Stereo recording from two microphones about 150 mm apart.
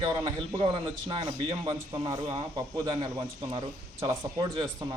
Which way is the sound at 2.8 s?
35° right (ahead or behind).